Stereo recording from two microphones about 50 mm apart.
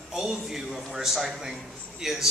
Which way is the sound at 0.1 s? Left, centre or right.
Centre.